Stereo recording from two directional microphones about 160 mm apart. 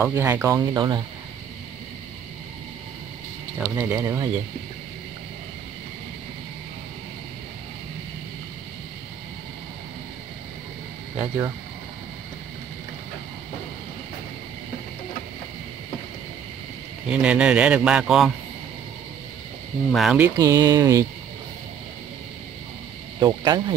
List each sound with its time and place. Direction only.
0.0 s a man's voice: 15° right (ahead or behind)
0.7 s speech: 30° right (ahead or behind)
3.7 s a man's voice: 15° right (ahead or behind)
11.1 s speech: 20° right (ahead or behind)
17.0 s a man's voice: 5° right (ahead or behind)
19.9 s speech: centre (ahead or behind)
20.3 s speech: 20° right (ahead or behind)
23.1 s speech: 25° right (ahead or behind)